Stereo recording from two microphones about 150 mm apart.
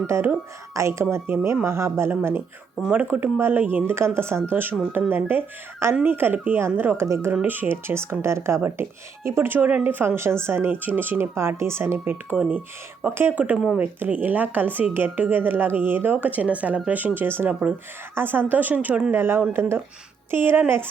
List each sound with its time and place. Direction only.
0.1 s speech: 15° right (ahead or behind)